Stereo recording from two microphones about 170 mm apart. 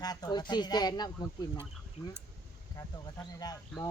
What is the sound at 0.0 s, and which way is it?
Speech, 20° left (ahead or behind).